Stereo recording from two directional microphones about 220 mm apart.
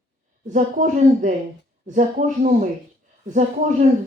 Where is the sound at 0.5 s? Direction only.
35° right (ahead or behind).